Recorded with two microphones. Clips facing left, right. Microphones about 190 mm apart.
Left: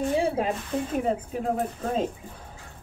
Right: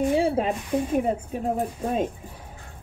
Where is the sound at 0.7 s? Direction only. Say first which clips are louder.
Right 5 dB; 10° right (ahead or behind).